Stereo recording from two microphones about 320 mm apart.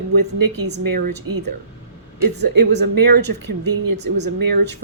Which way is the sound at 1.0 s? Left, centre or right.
Right.